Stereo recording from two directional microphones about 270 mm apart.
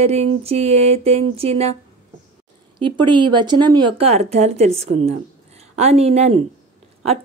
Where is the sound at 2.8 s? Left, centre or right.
Centre.